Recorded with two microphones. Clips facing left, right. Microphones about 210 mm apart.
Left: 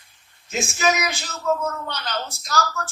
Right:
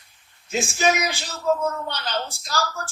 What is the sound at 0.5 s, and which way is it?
A woman's voice, 30° right (ahead or behind).